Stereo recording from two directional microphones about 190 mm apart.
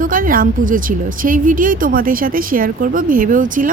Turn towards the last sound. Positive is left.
turn(degrees=-45)  # may be behind; listen again after turning